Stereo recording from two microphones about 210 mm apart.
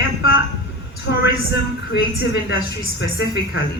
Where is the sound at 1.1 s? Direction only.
60° left (ahead or behind).